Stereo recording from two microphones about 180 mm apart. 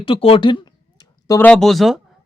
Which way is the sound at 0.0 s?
30° left (ahead or behind).